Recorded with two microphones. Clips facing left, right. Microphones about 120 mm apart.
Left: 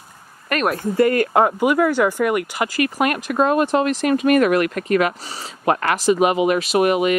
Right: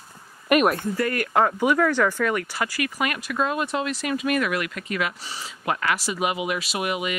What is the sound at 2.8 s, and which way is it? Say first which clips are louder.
Speech: left 10 dB; 50° left (ahead or behind).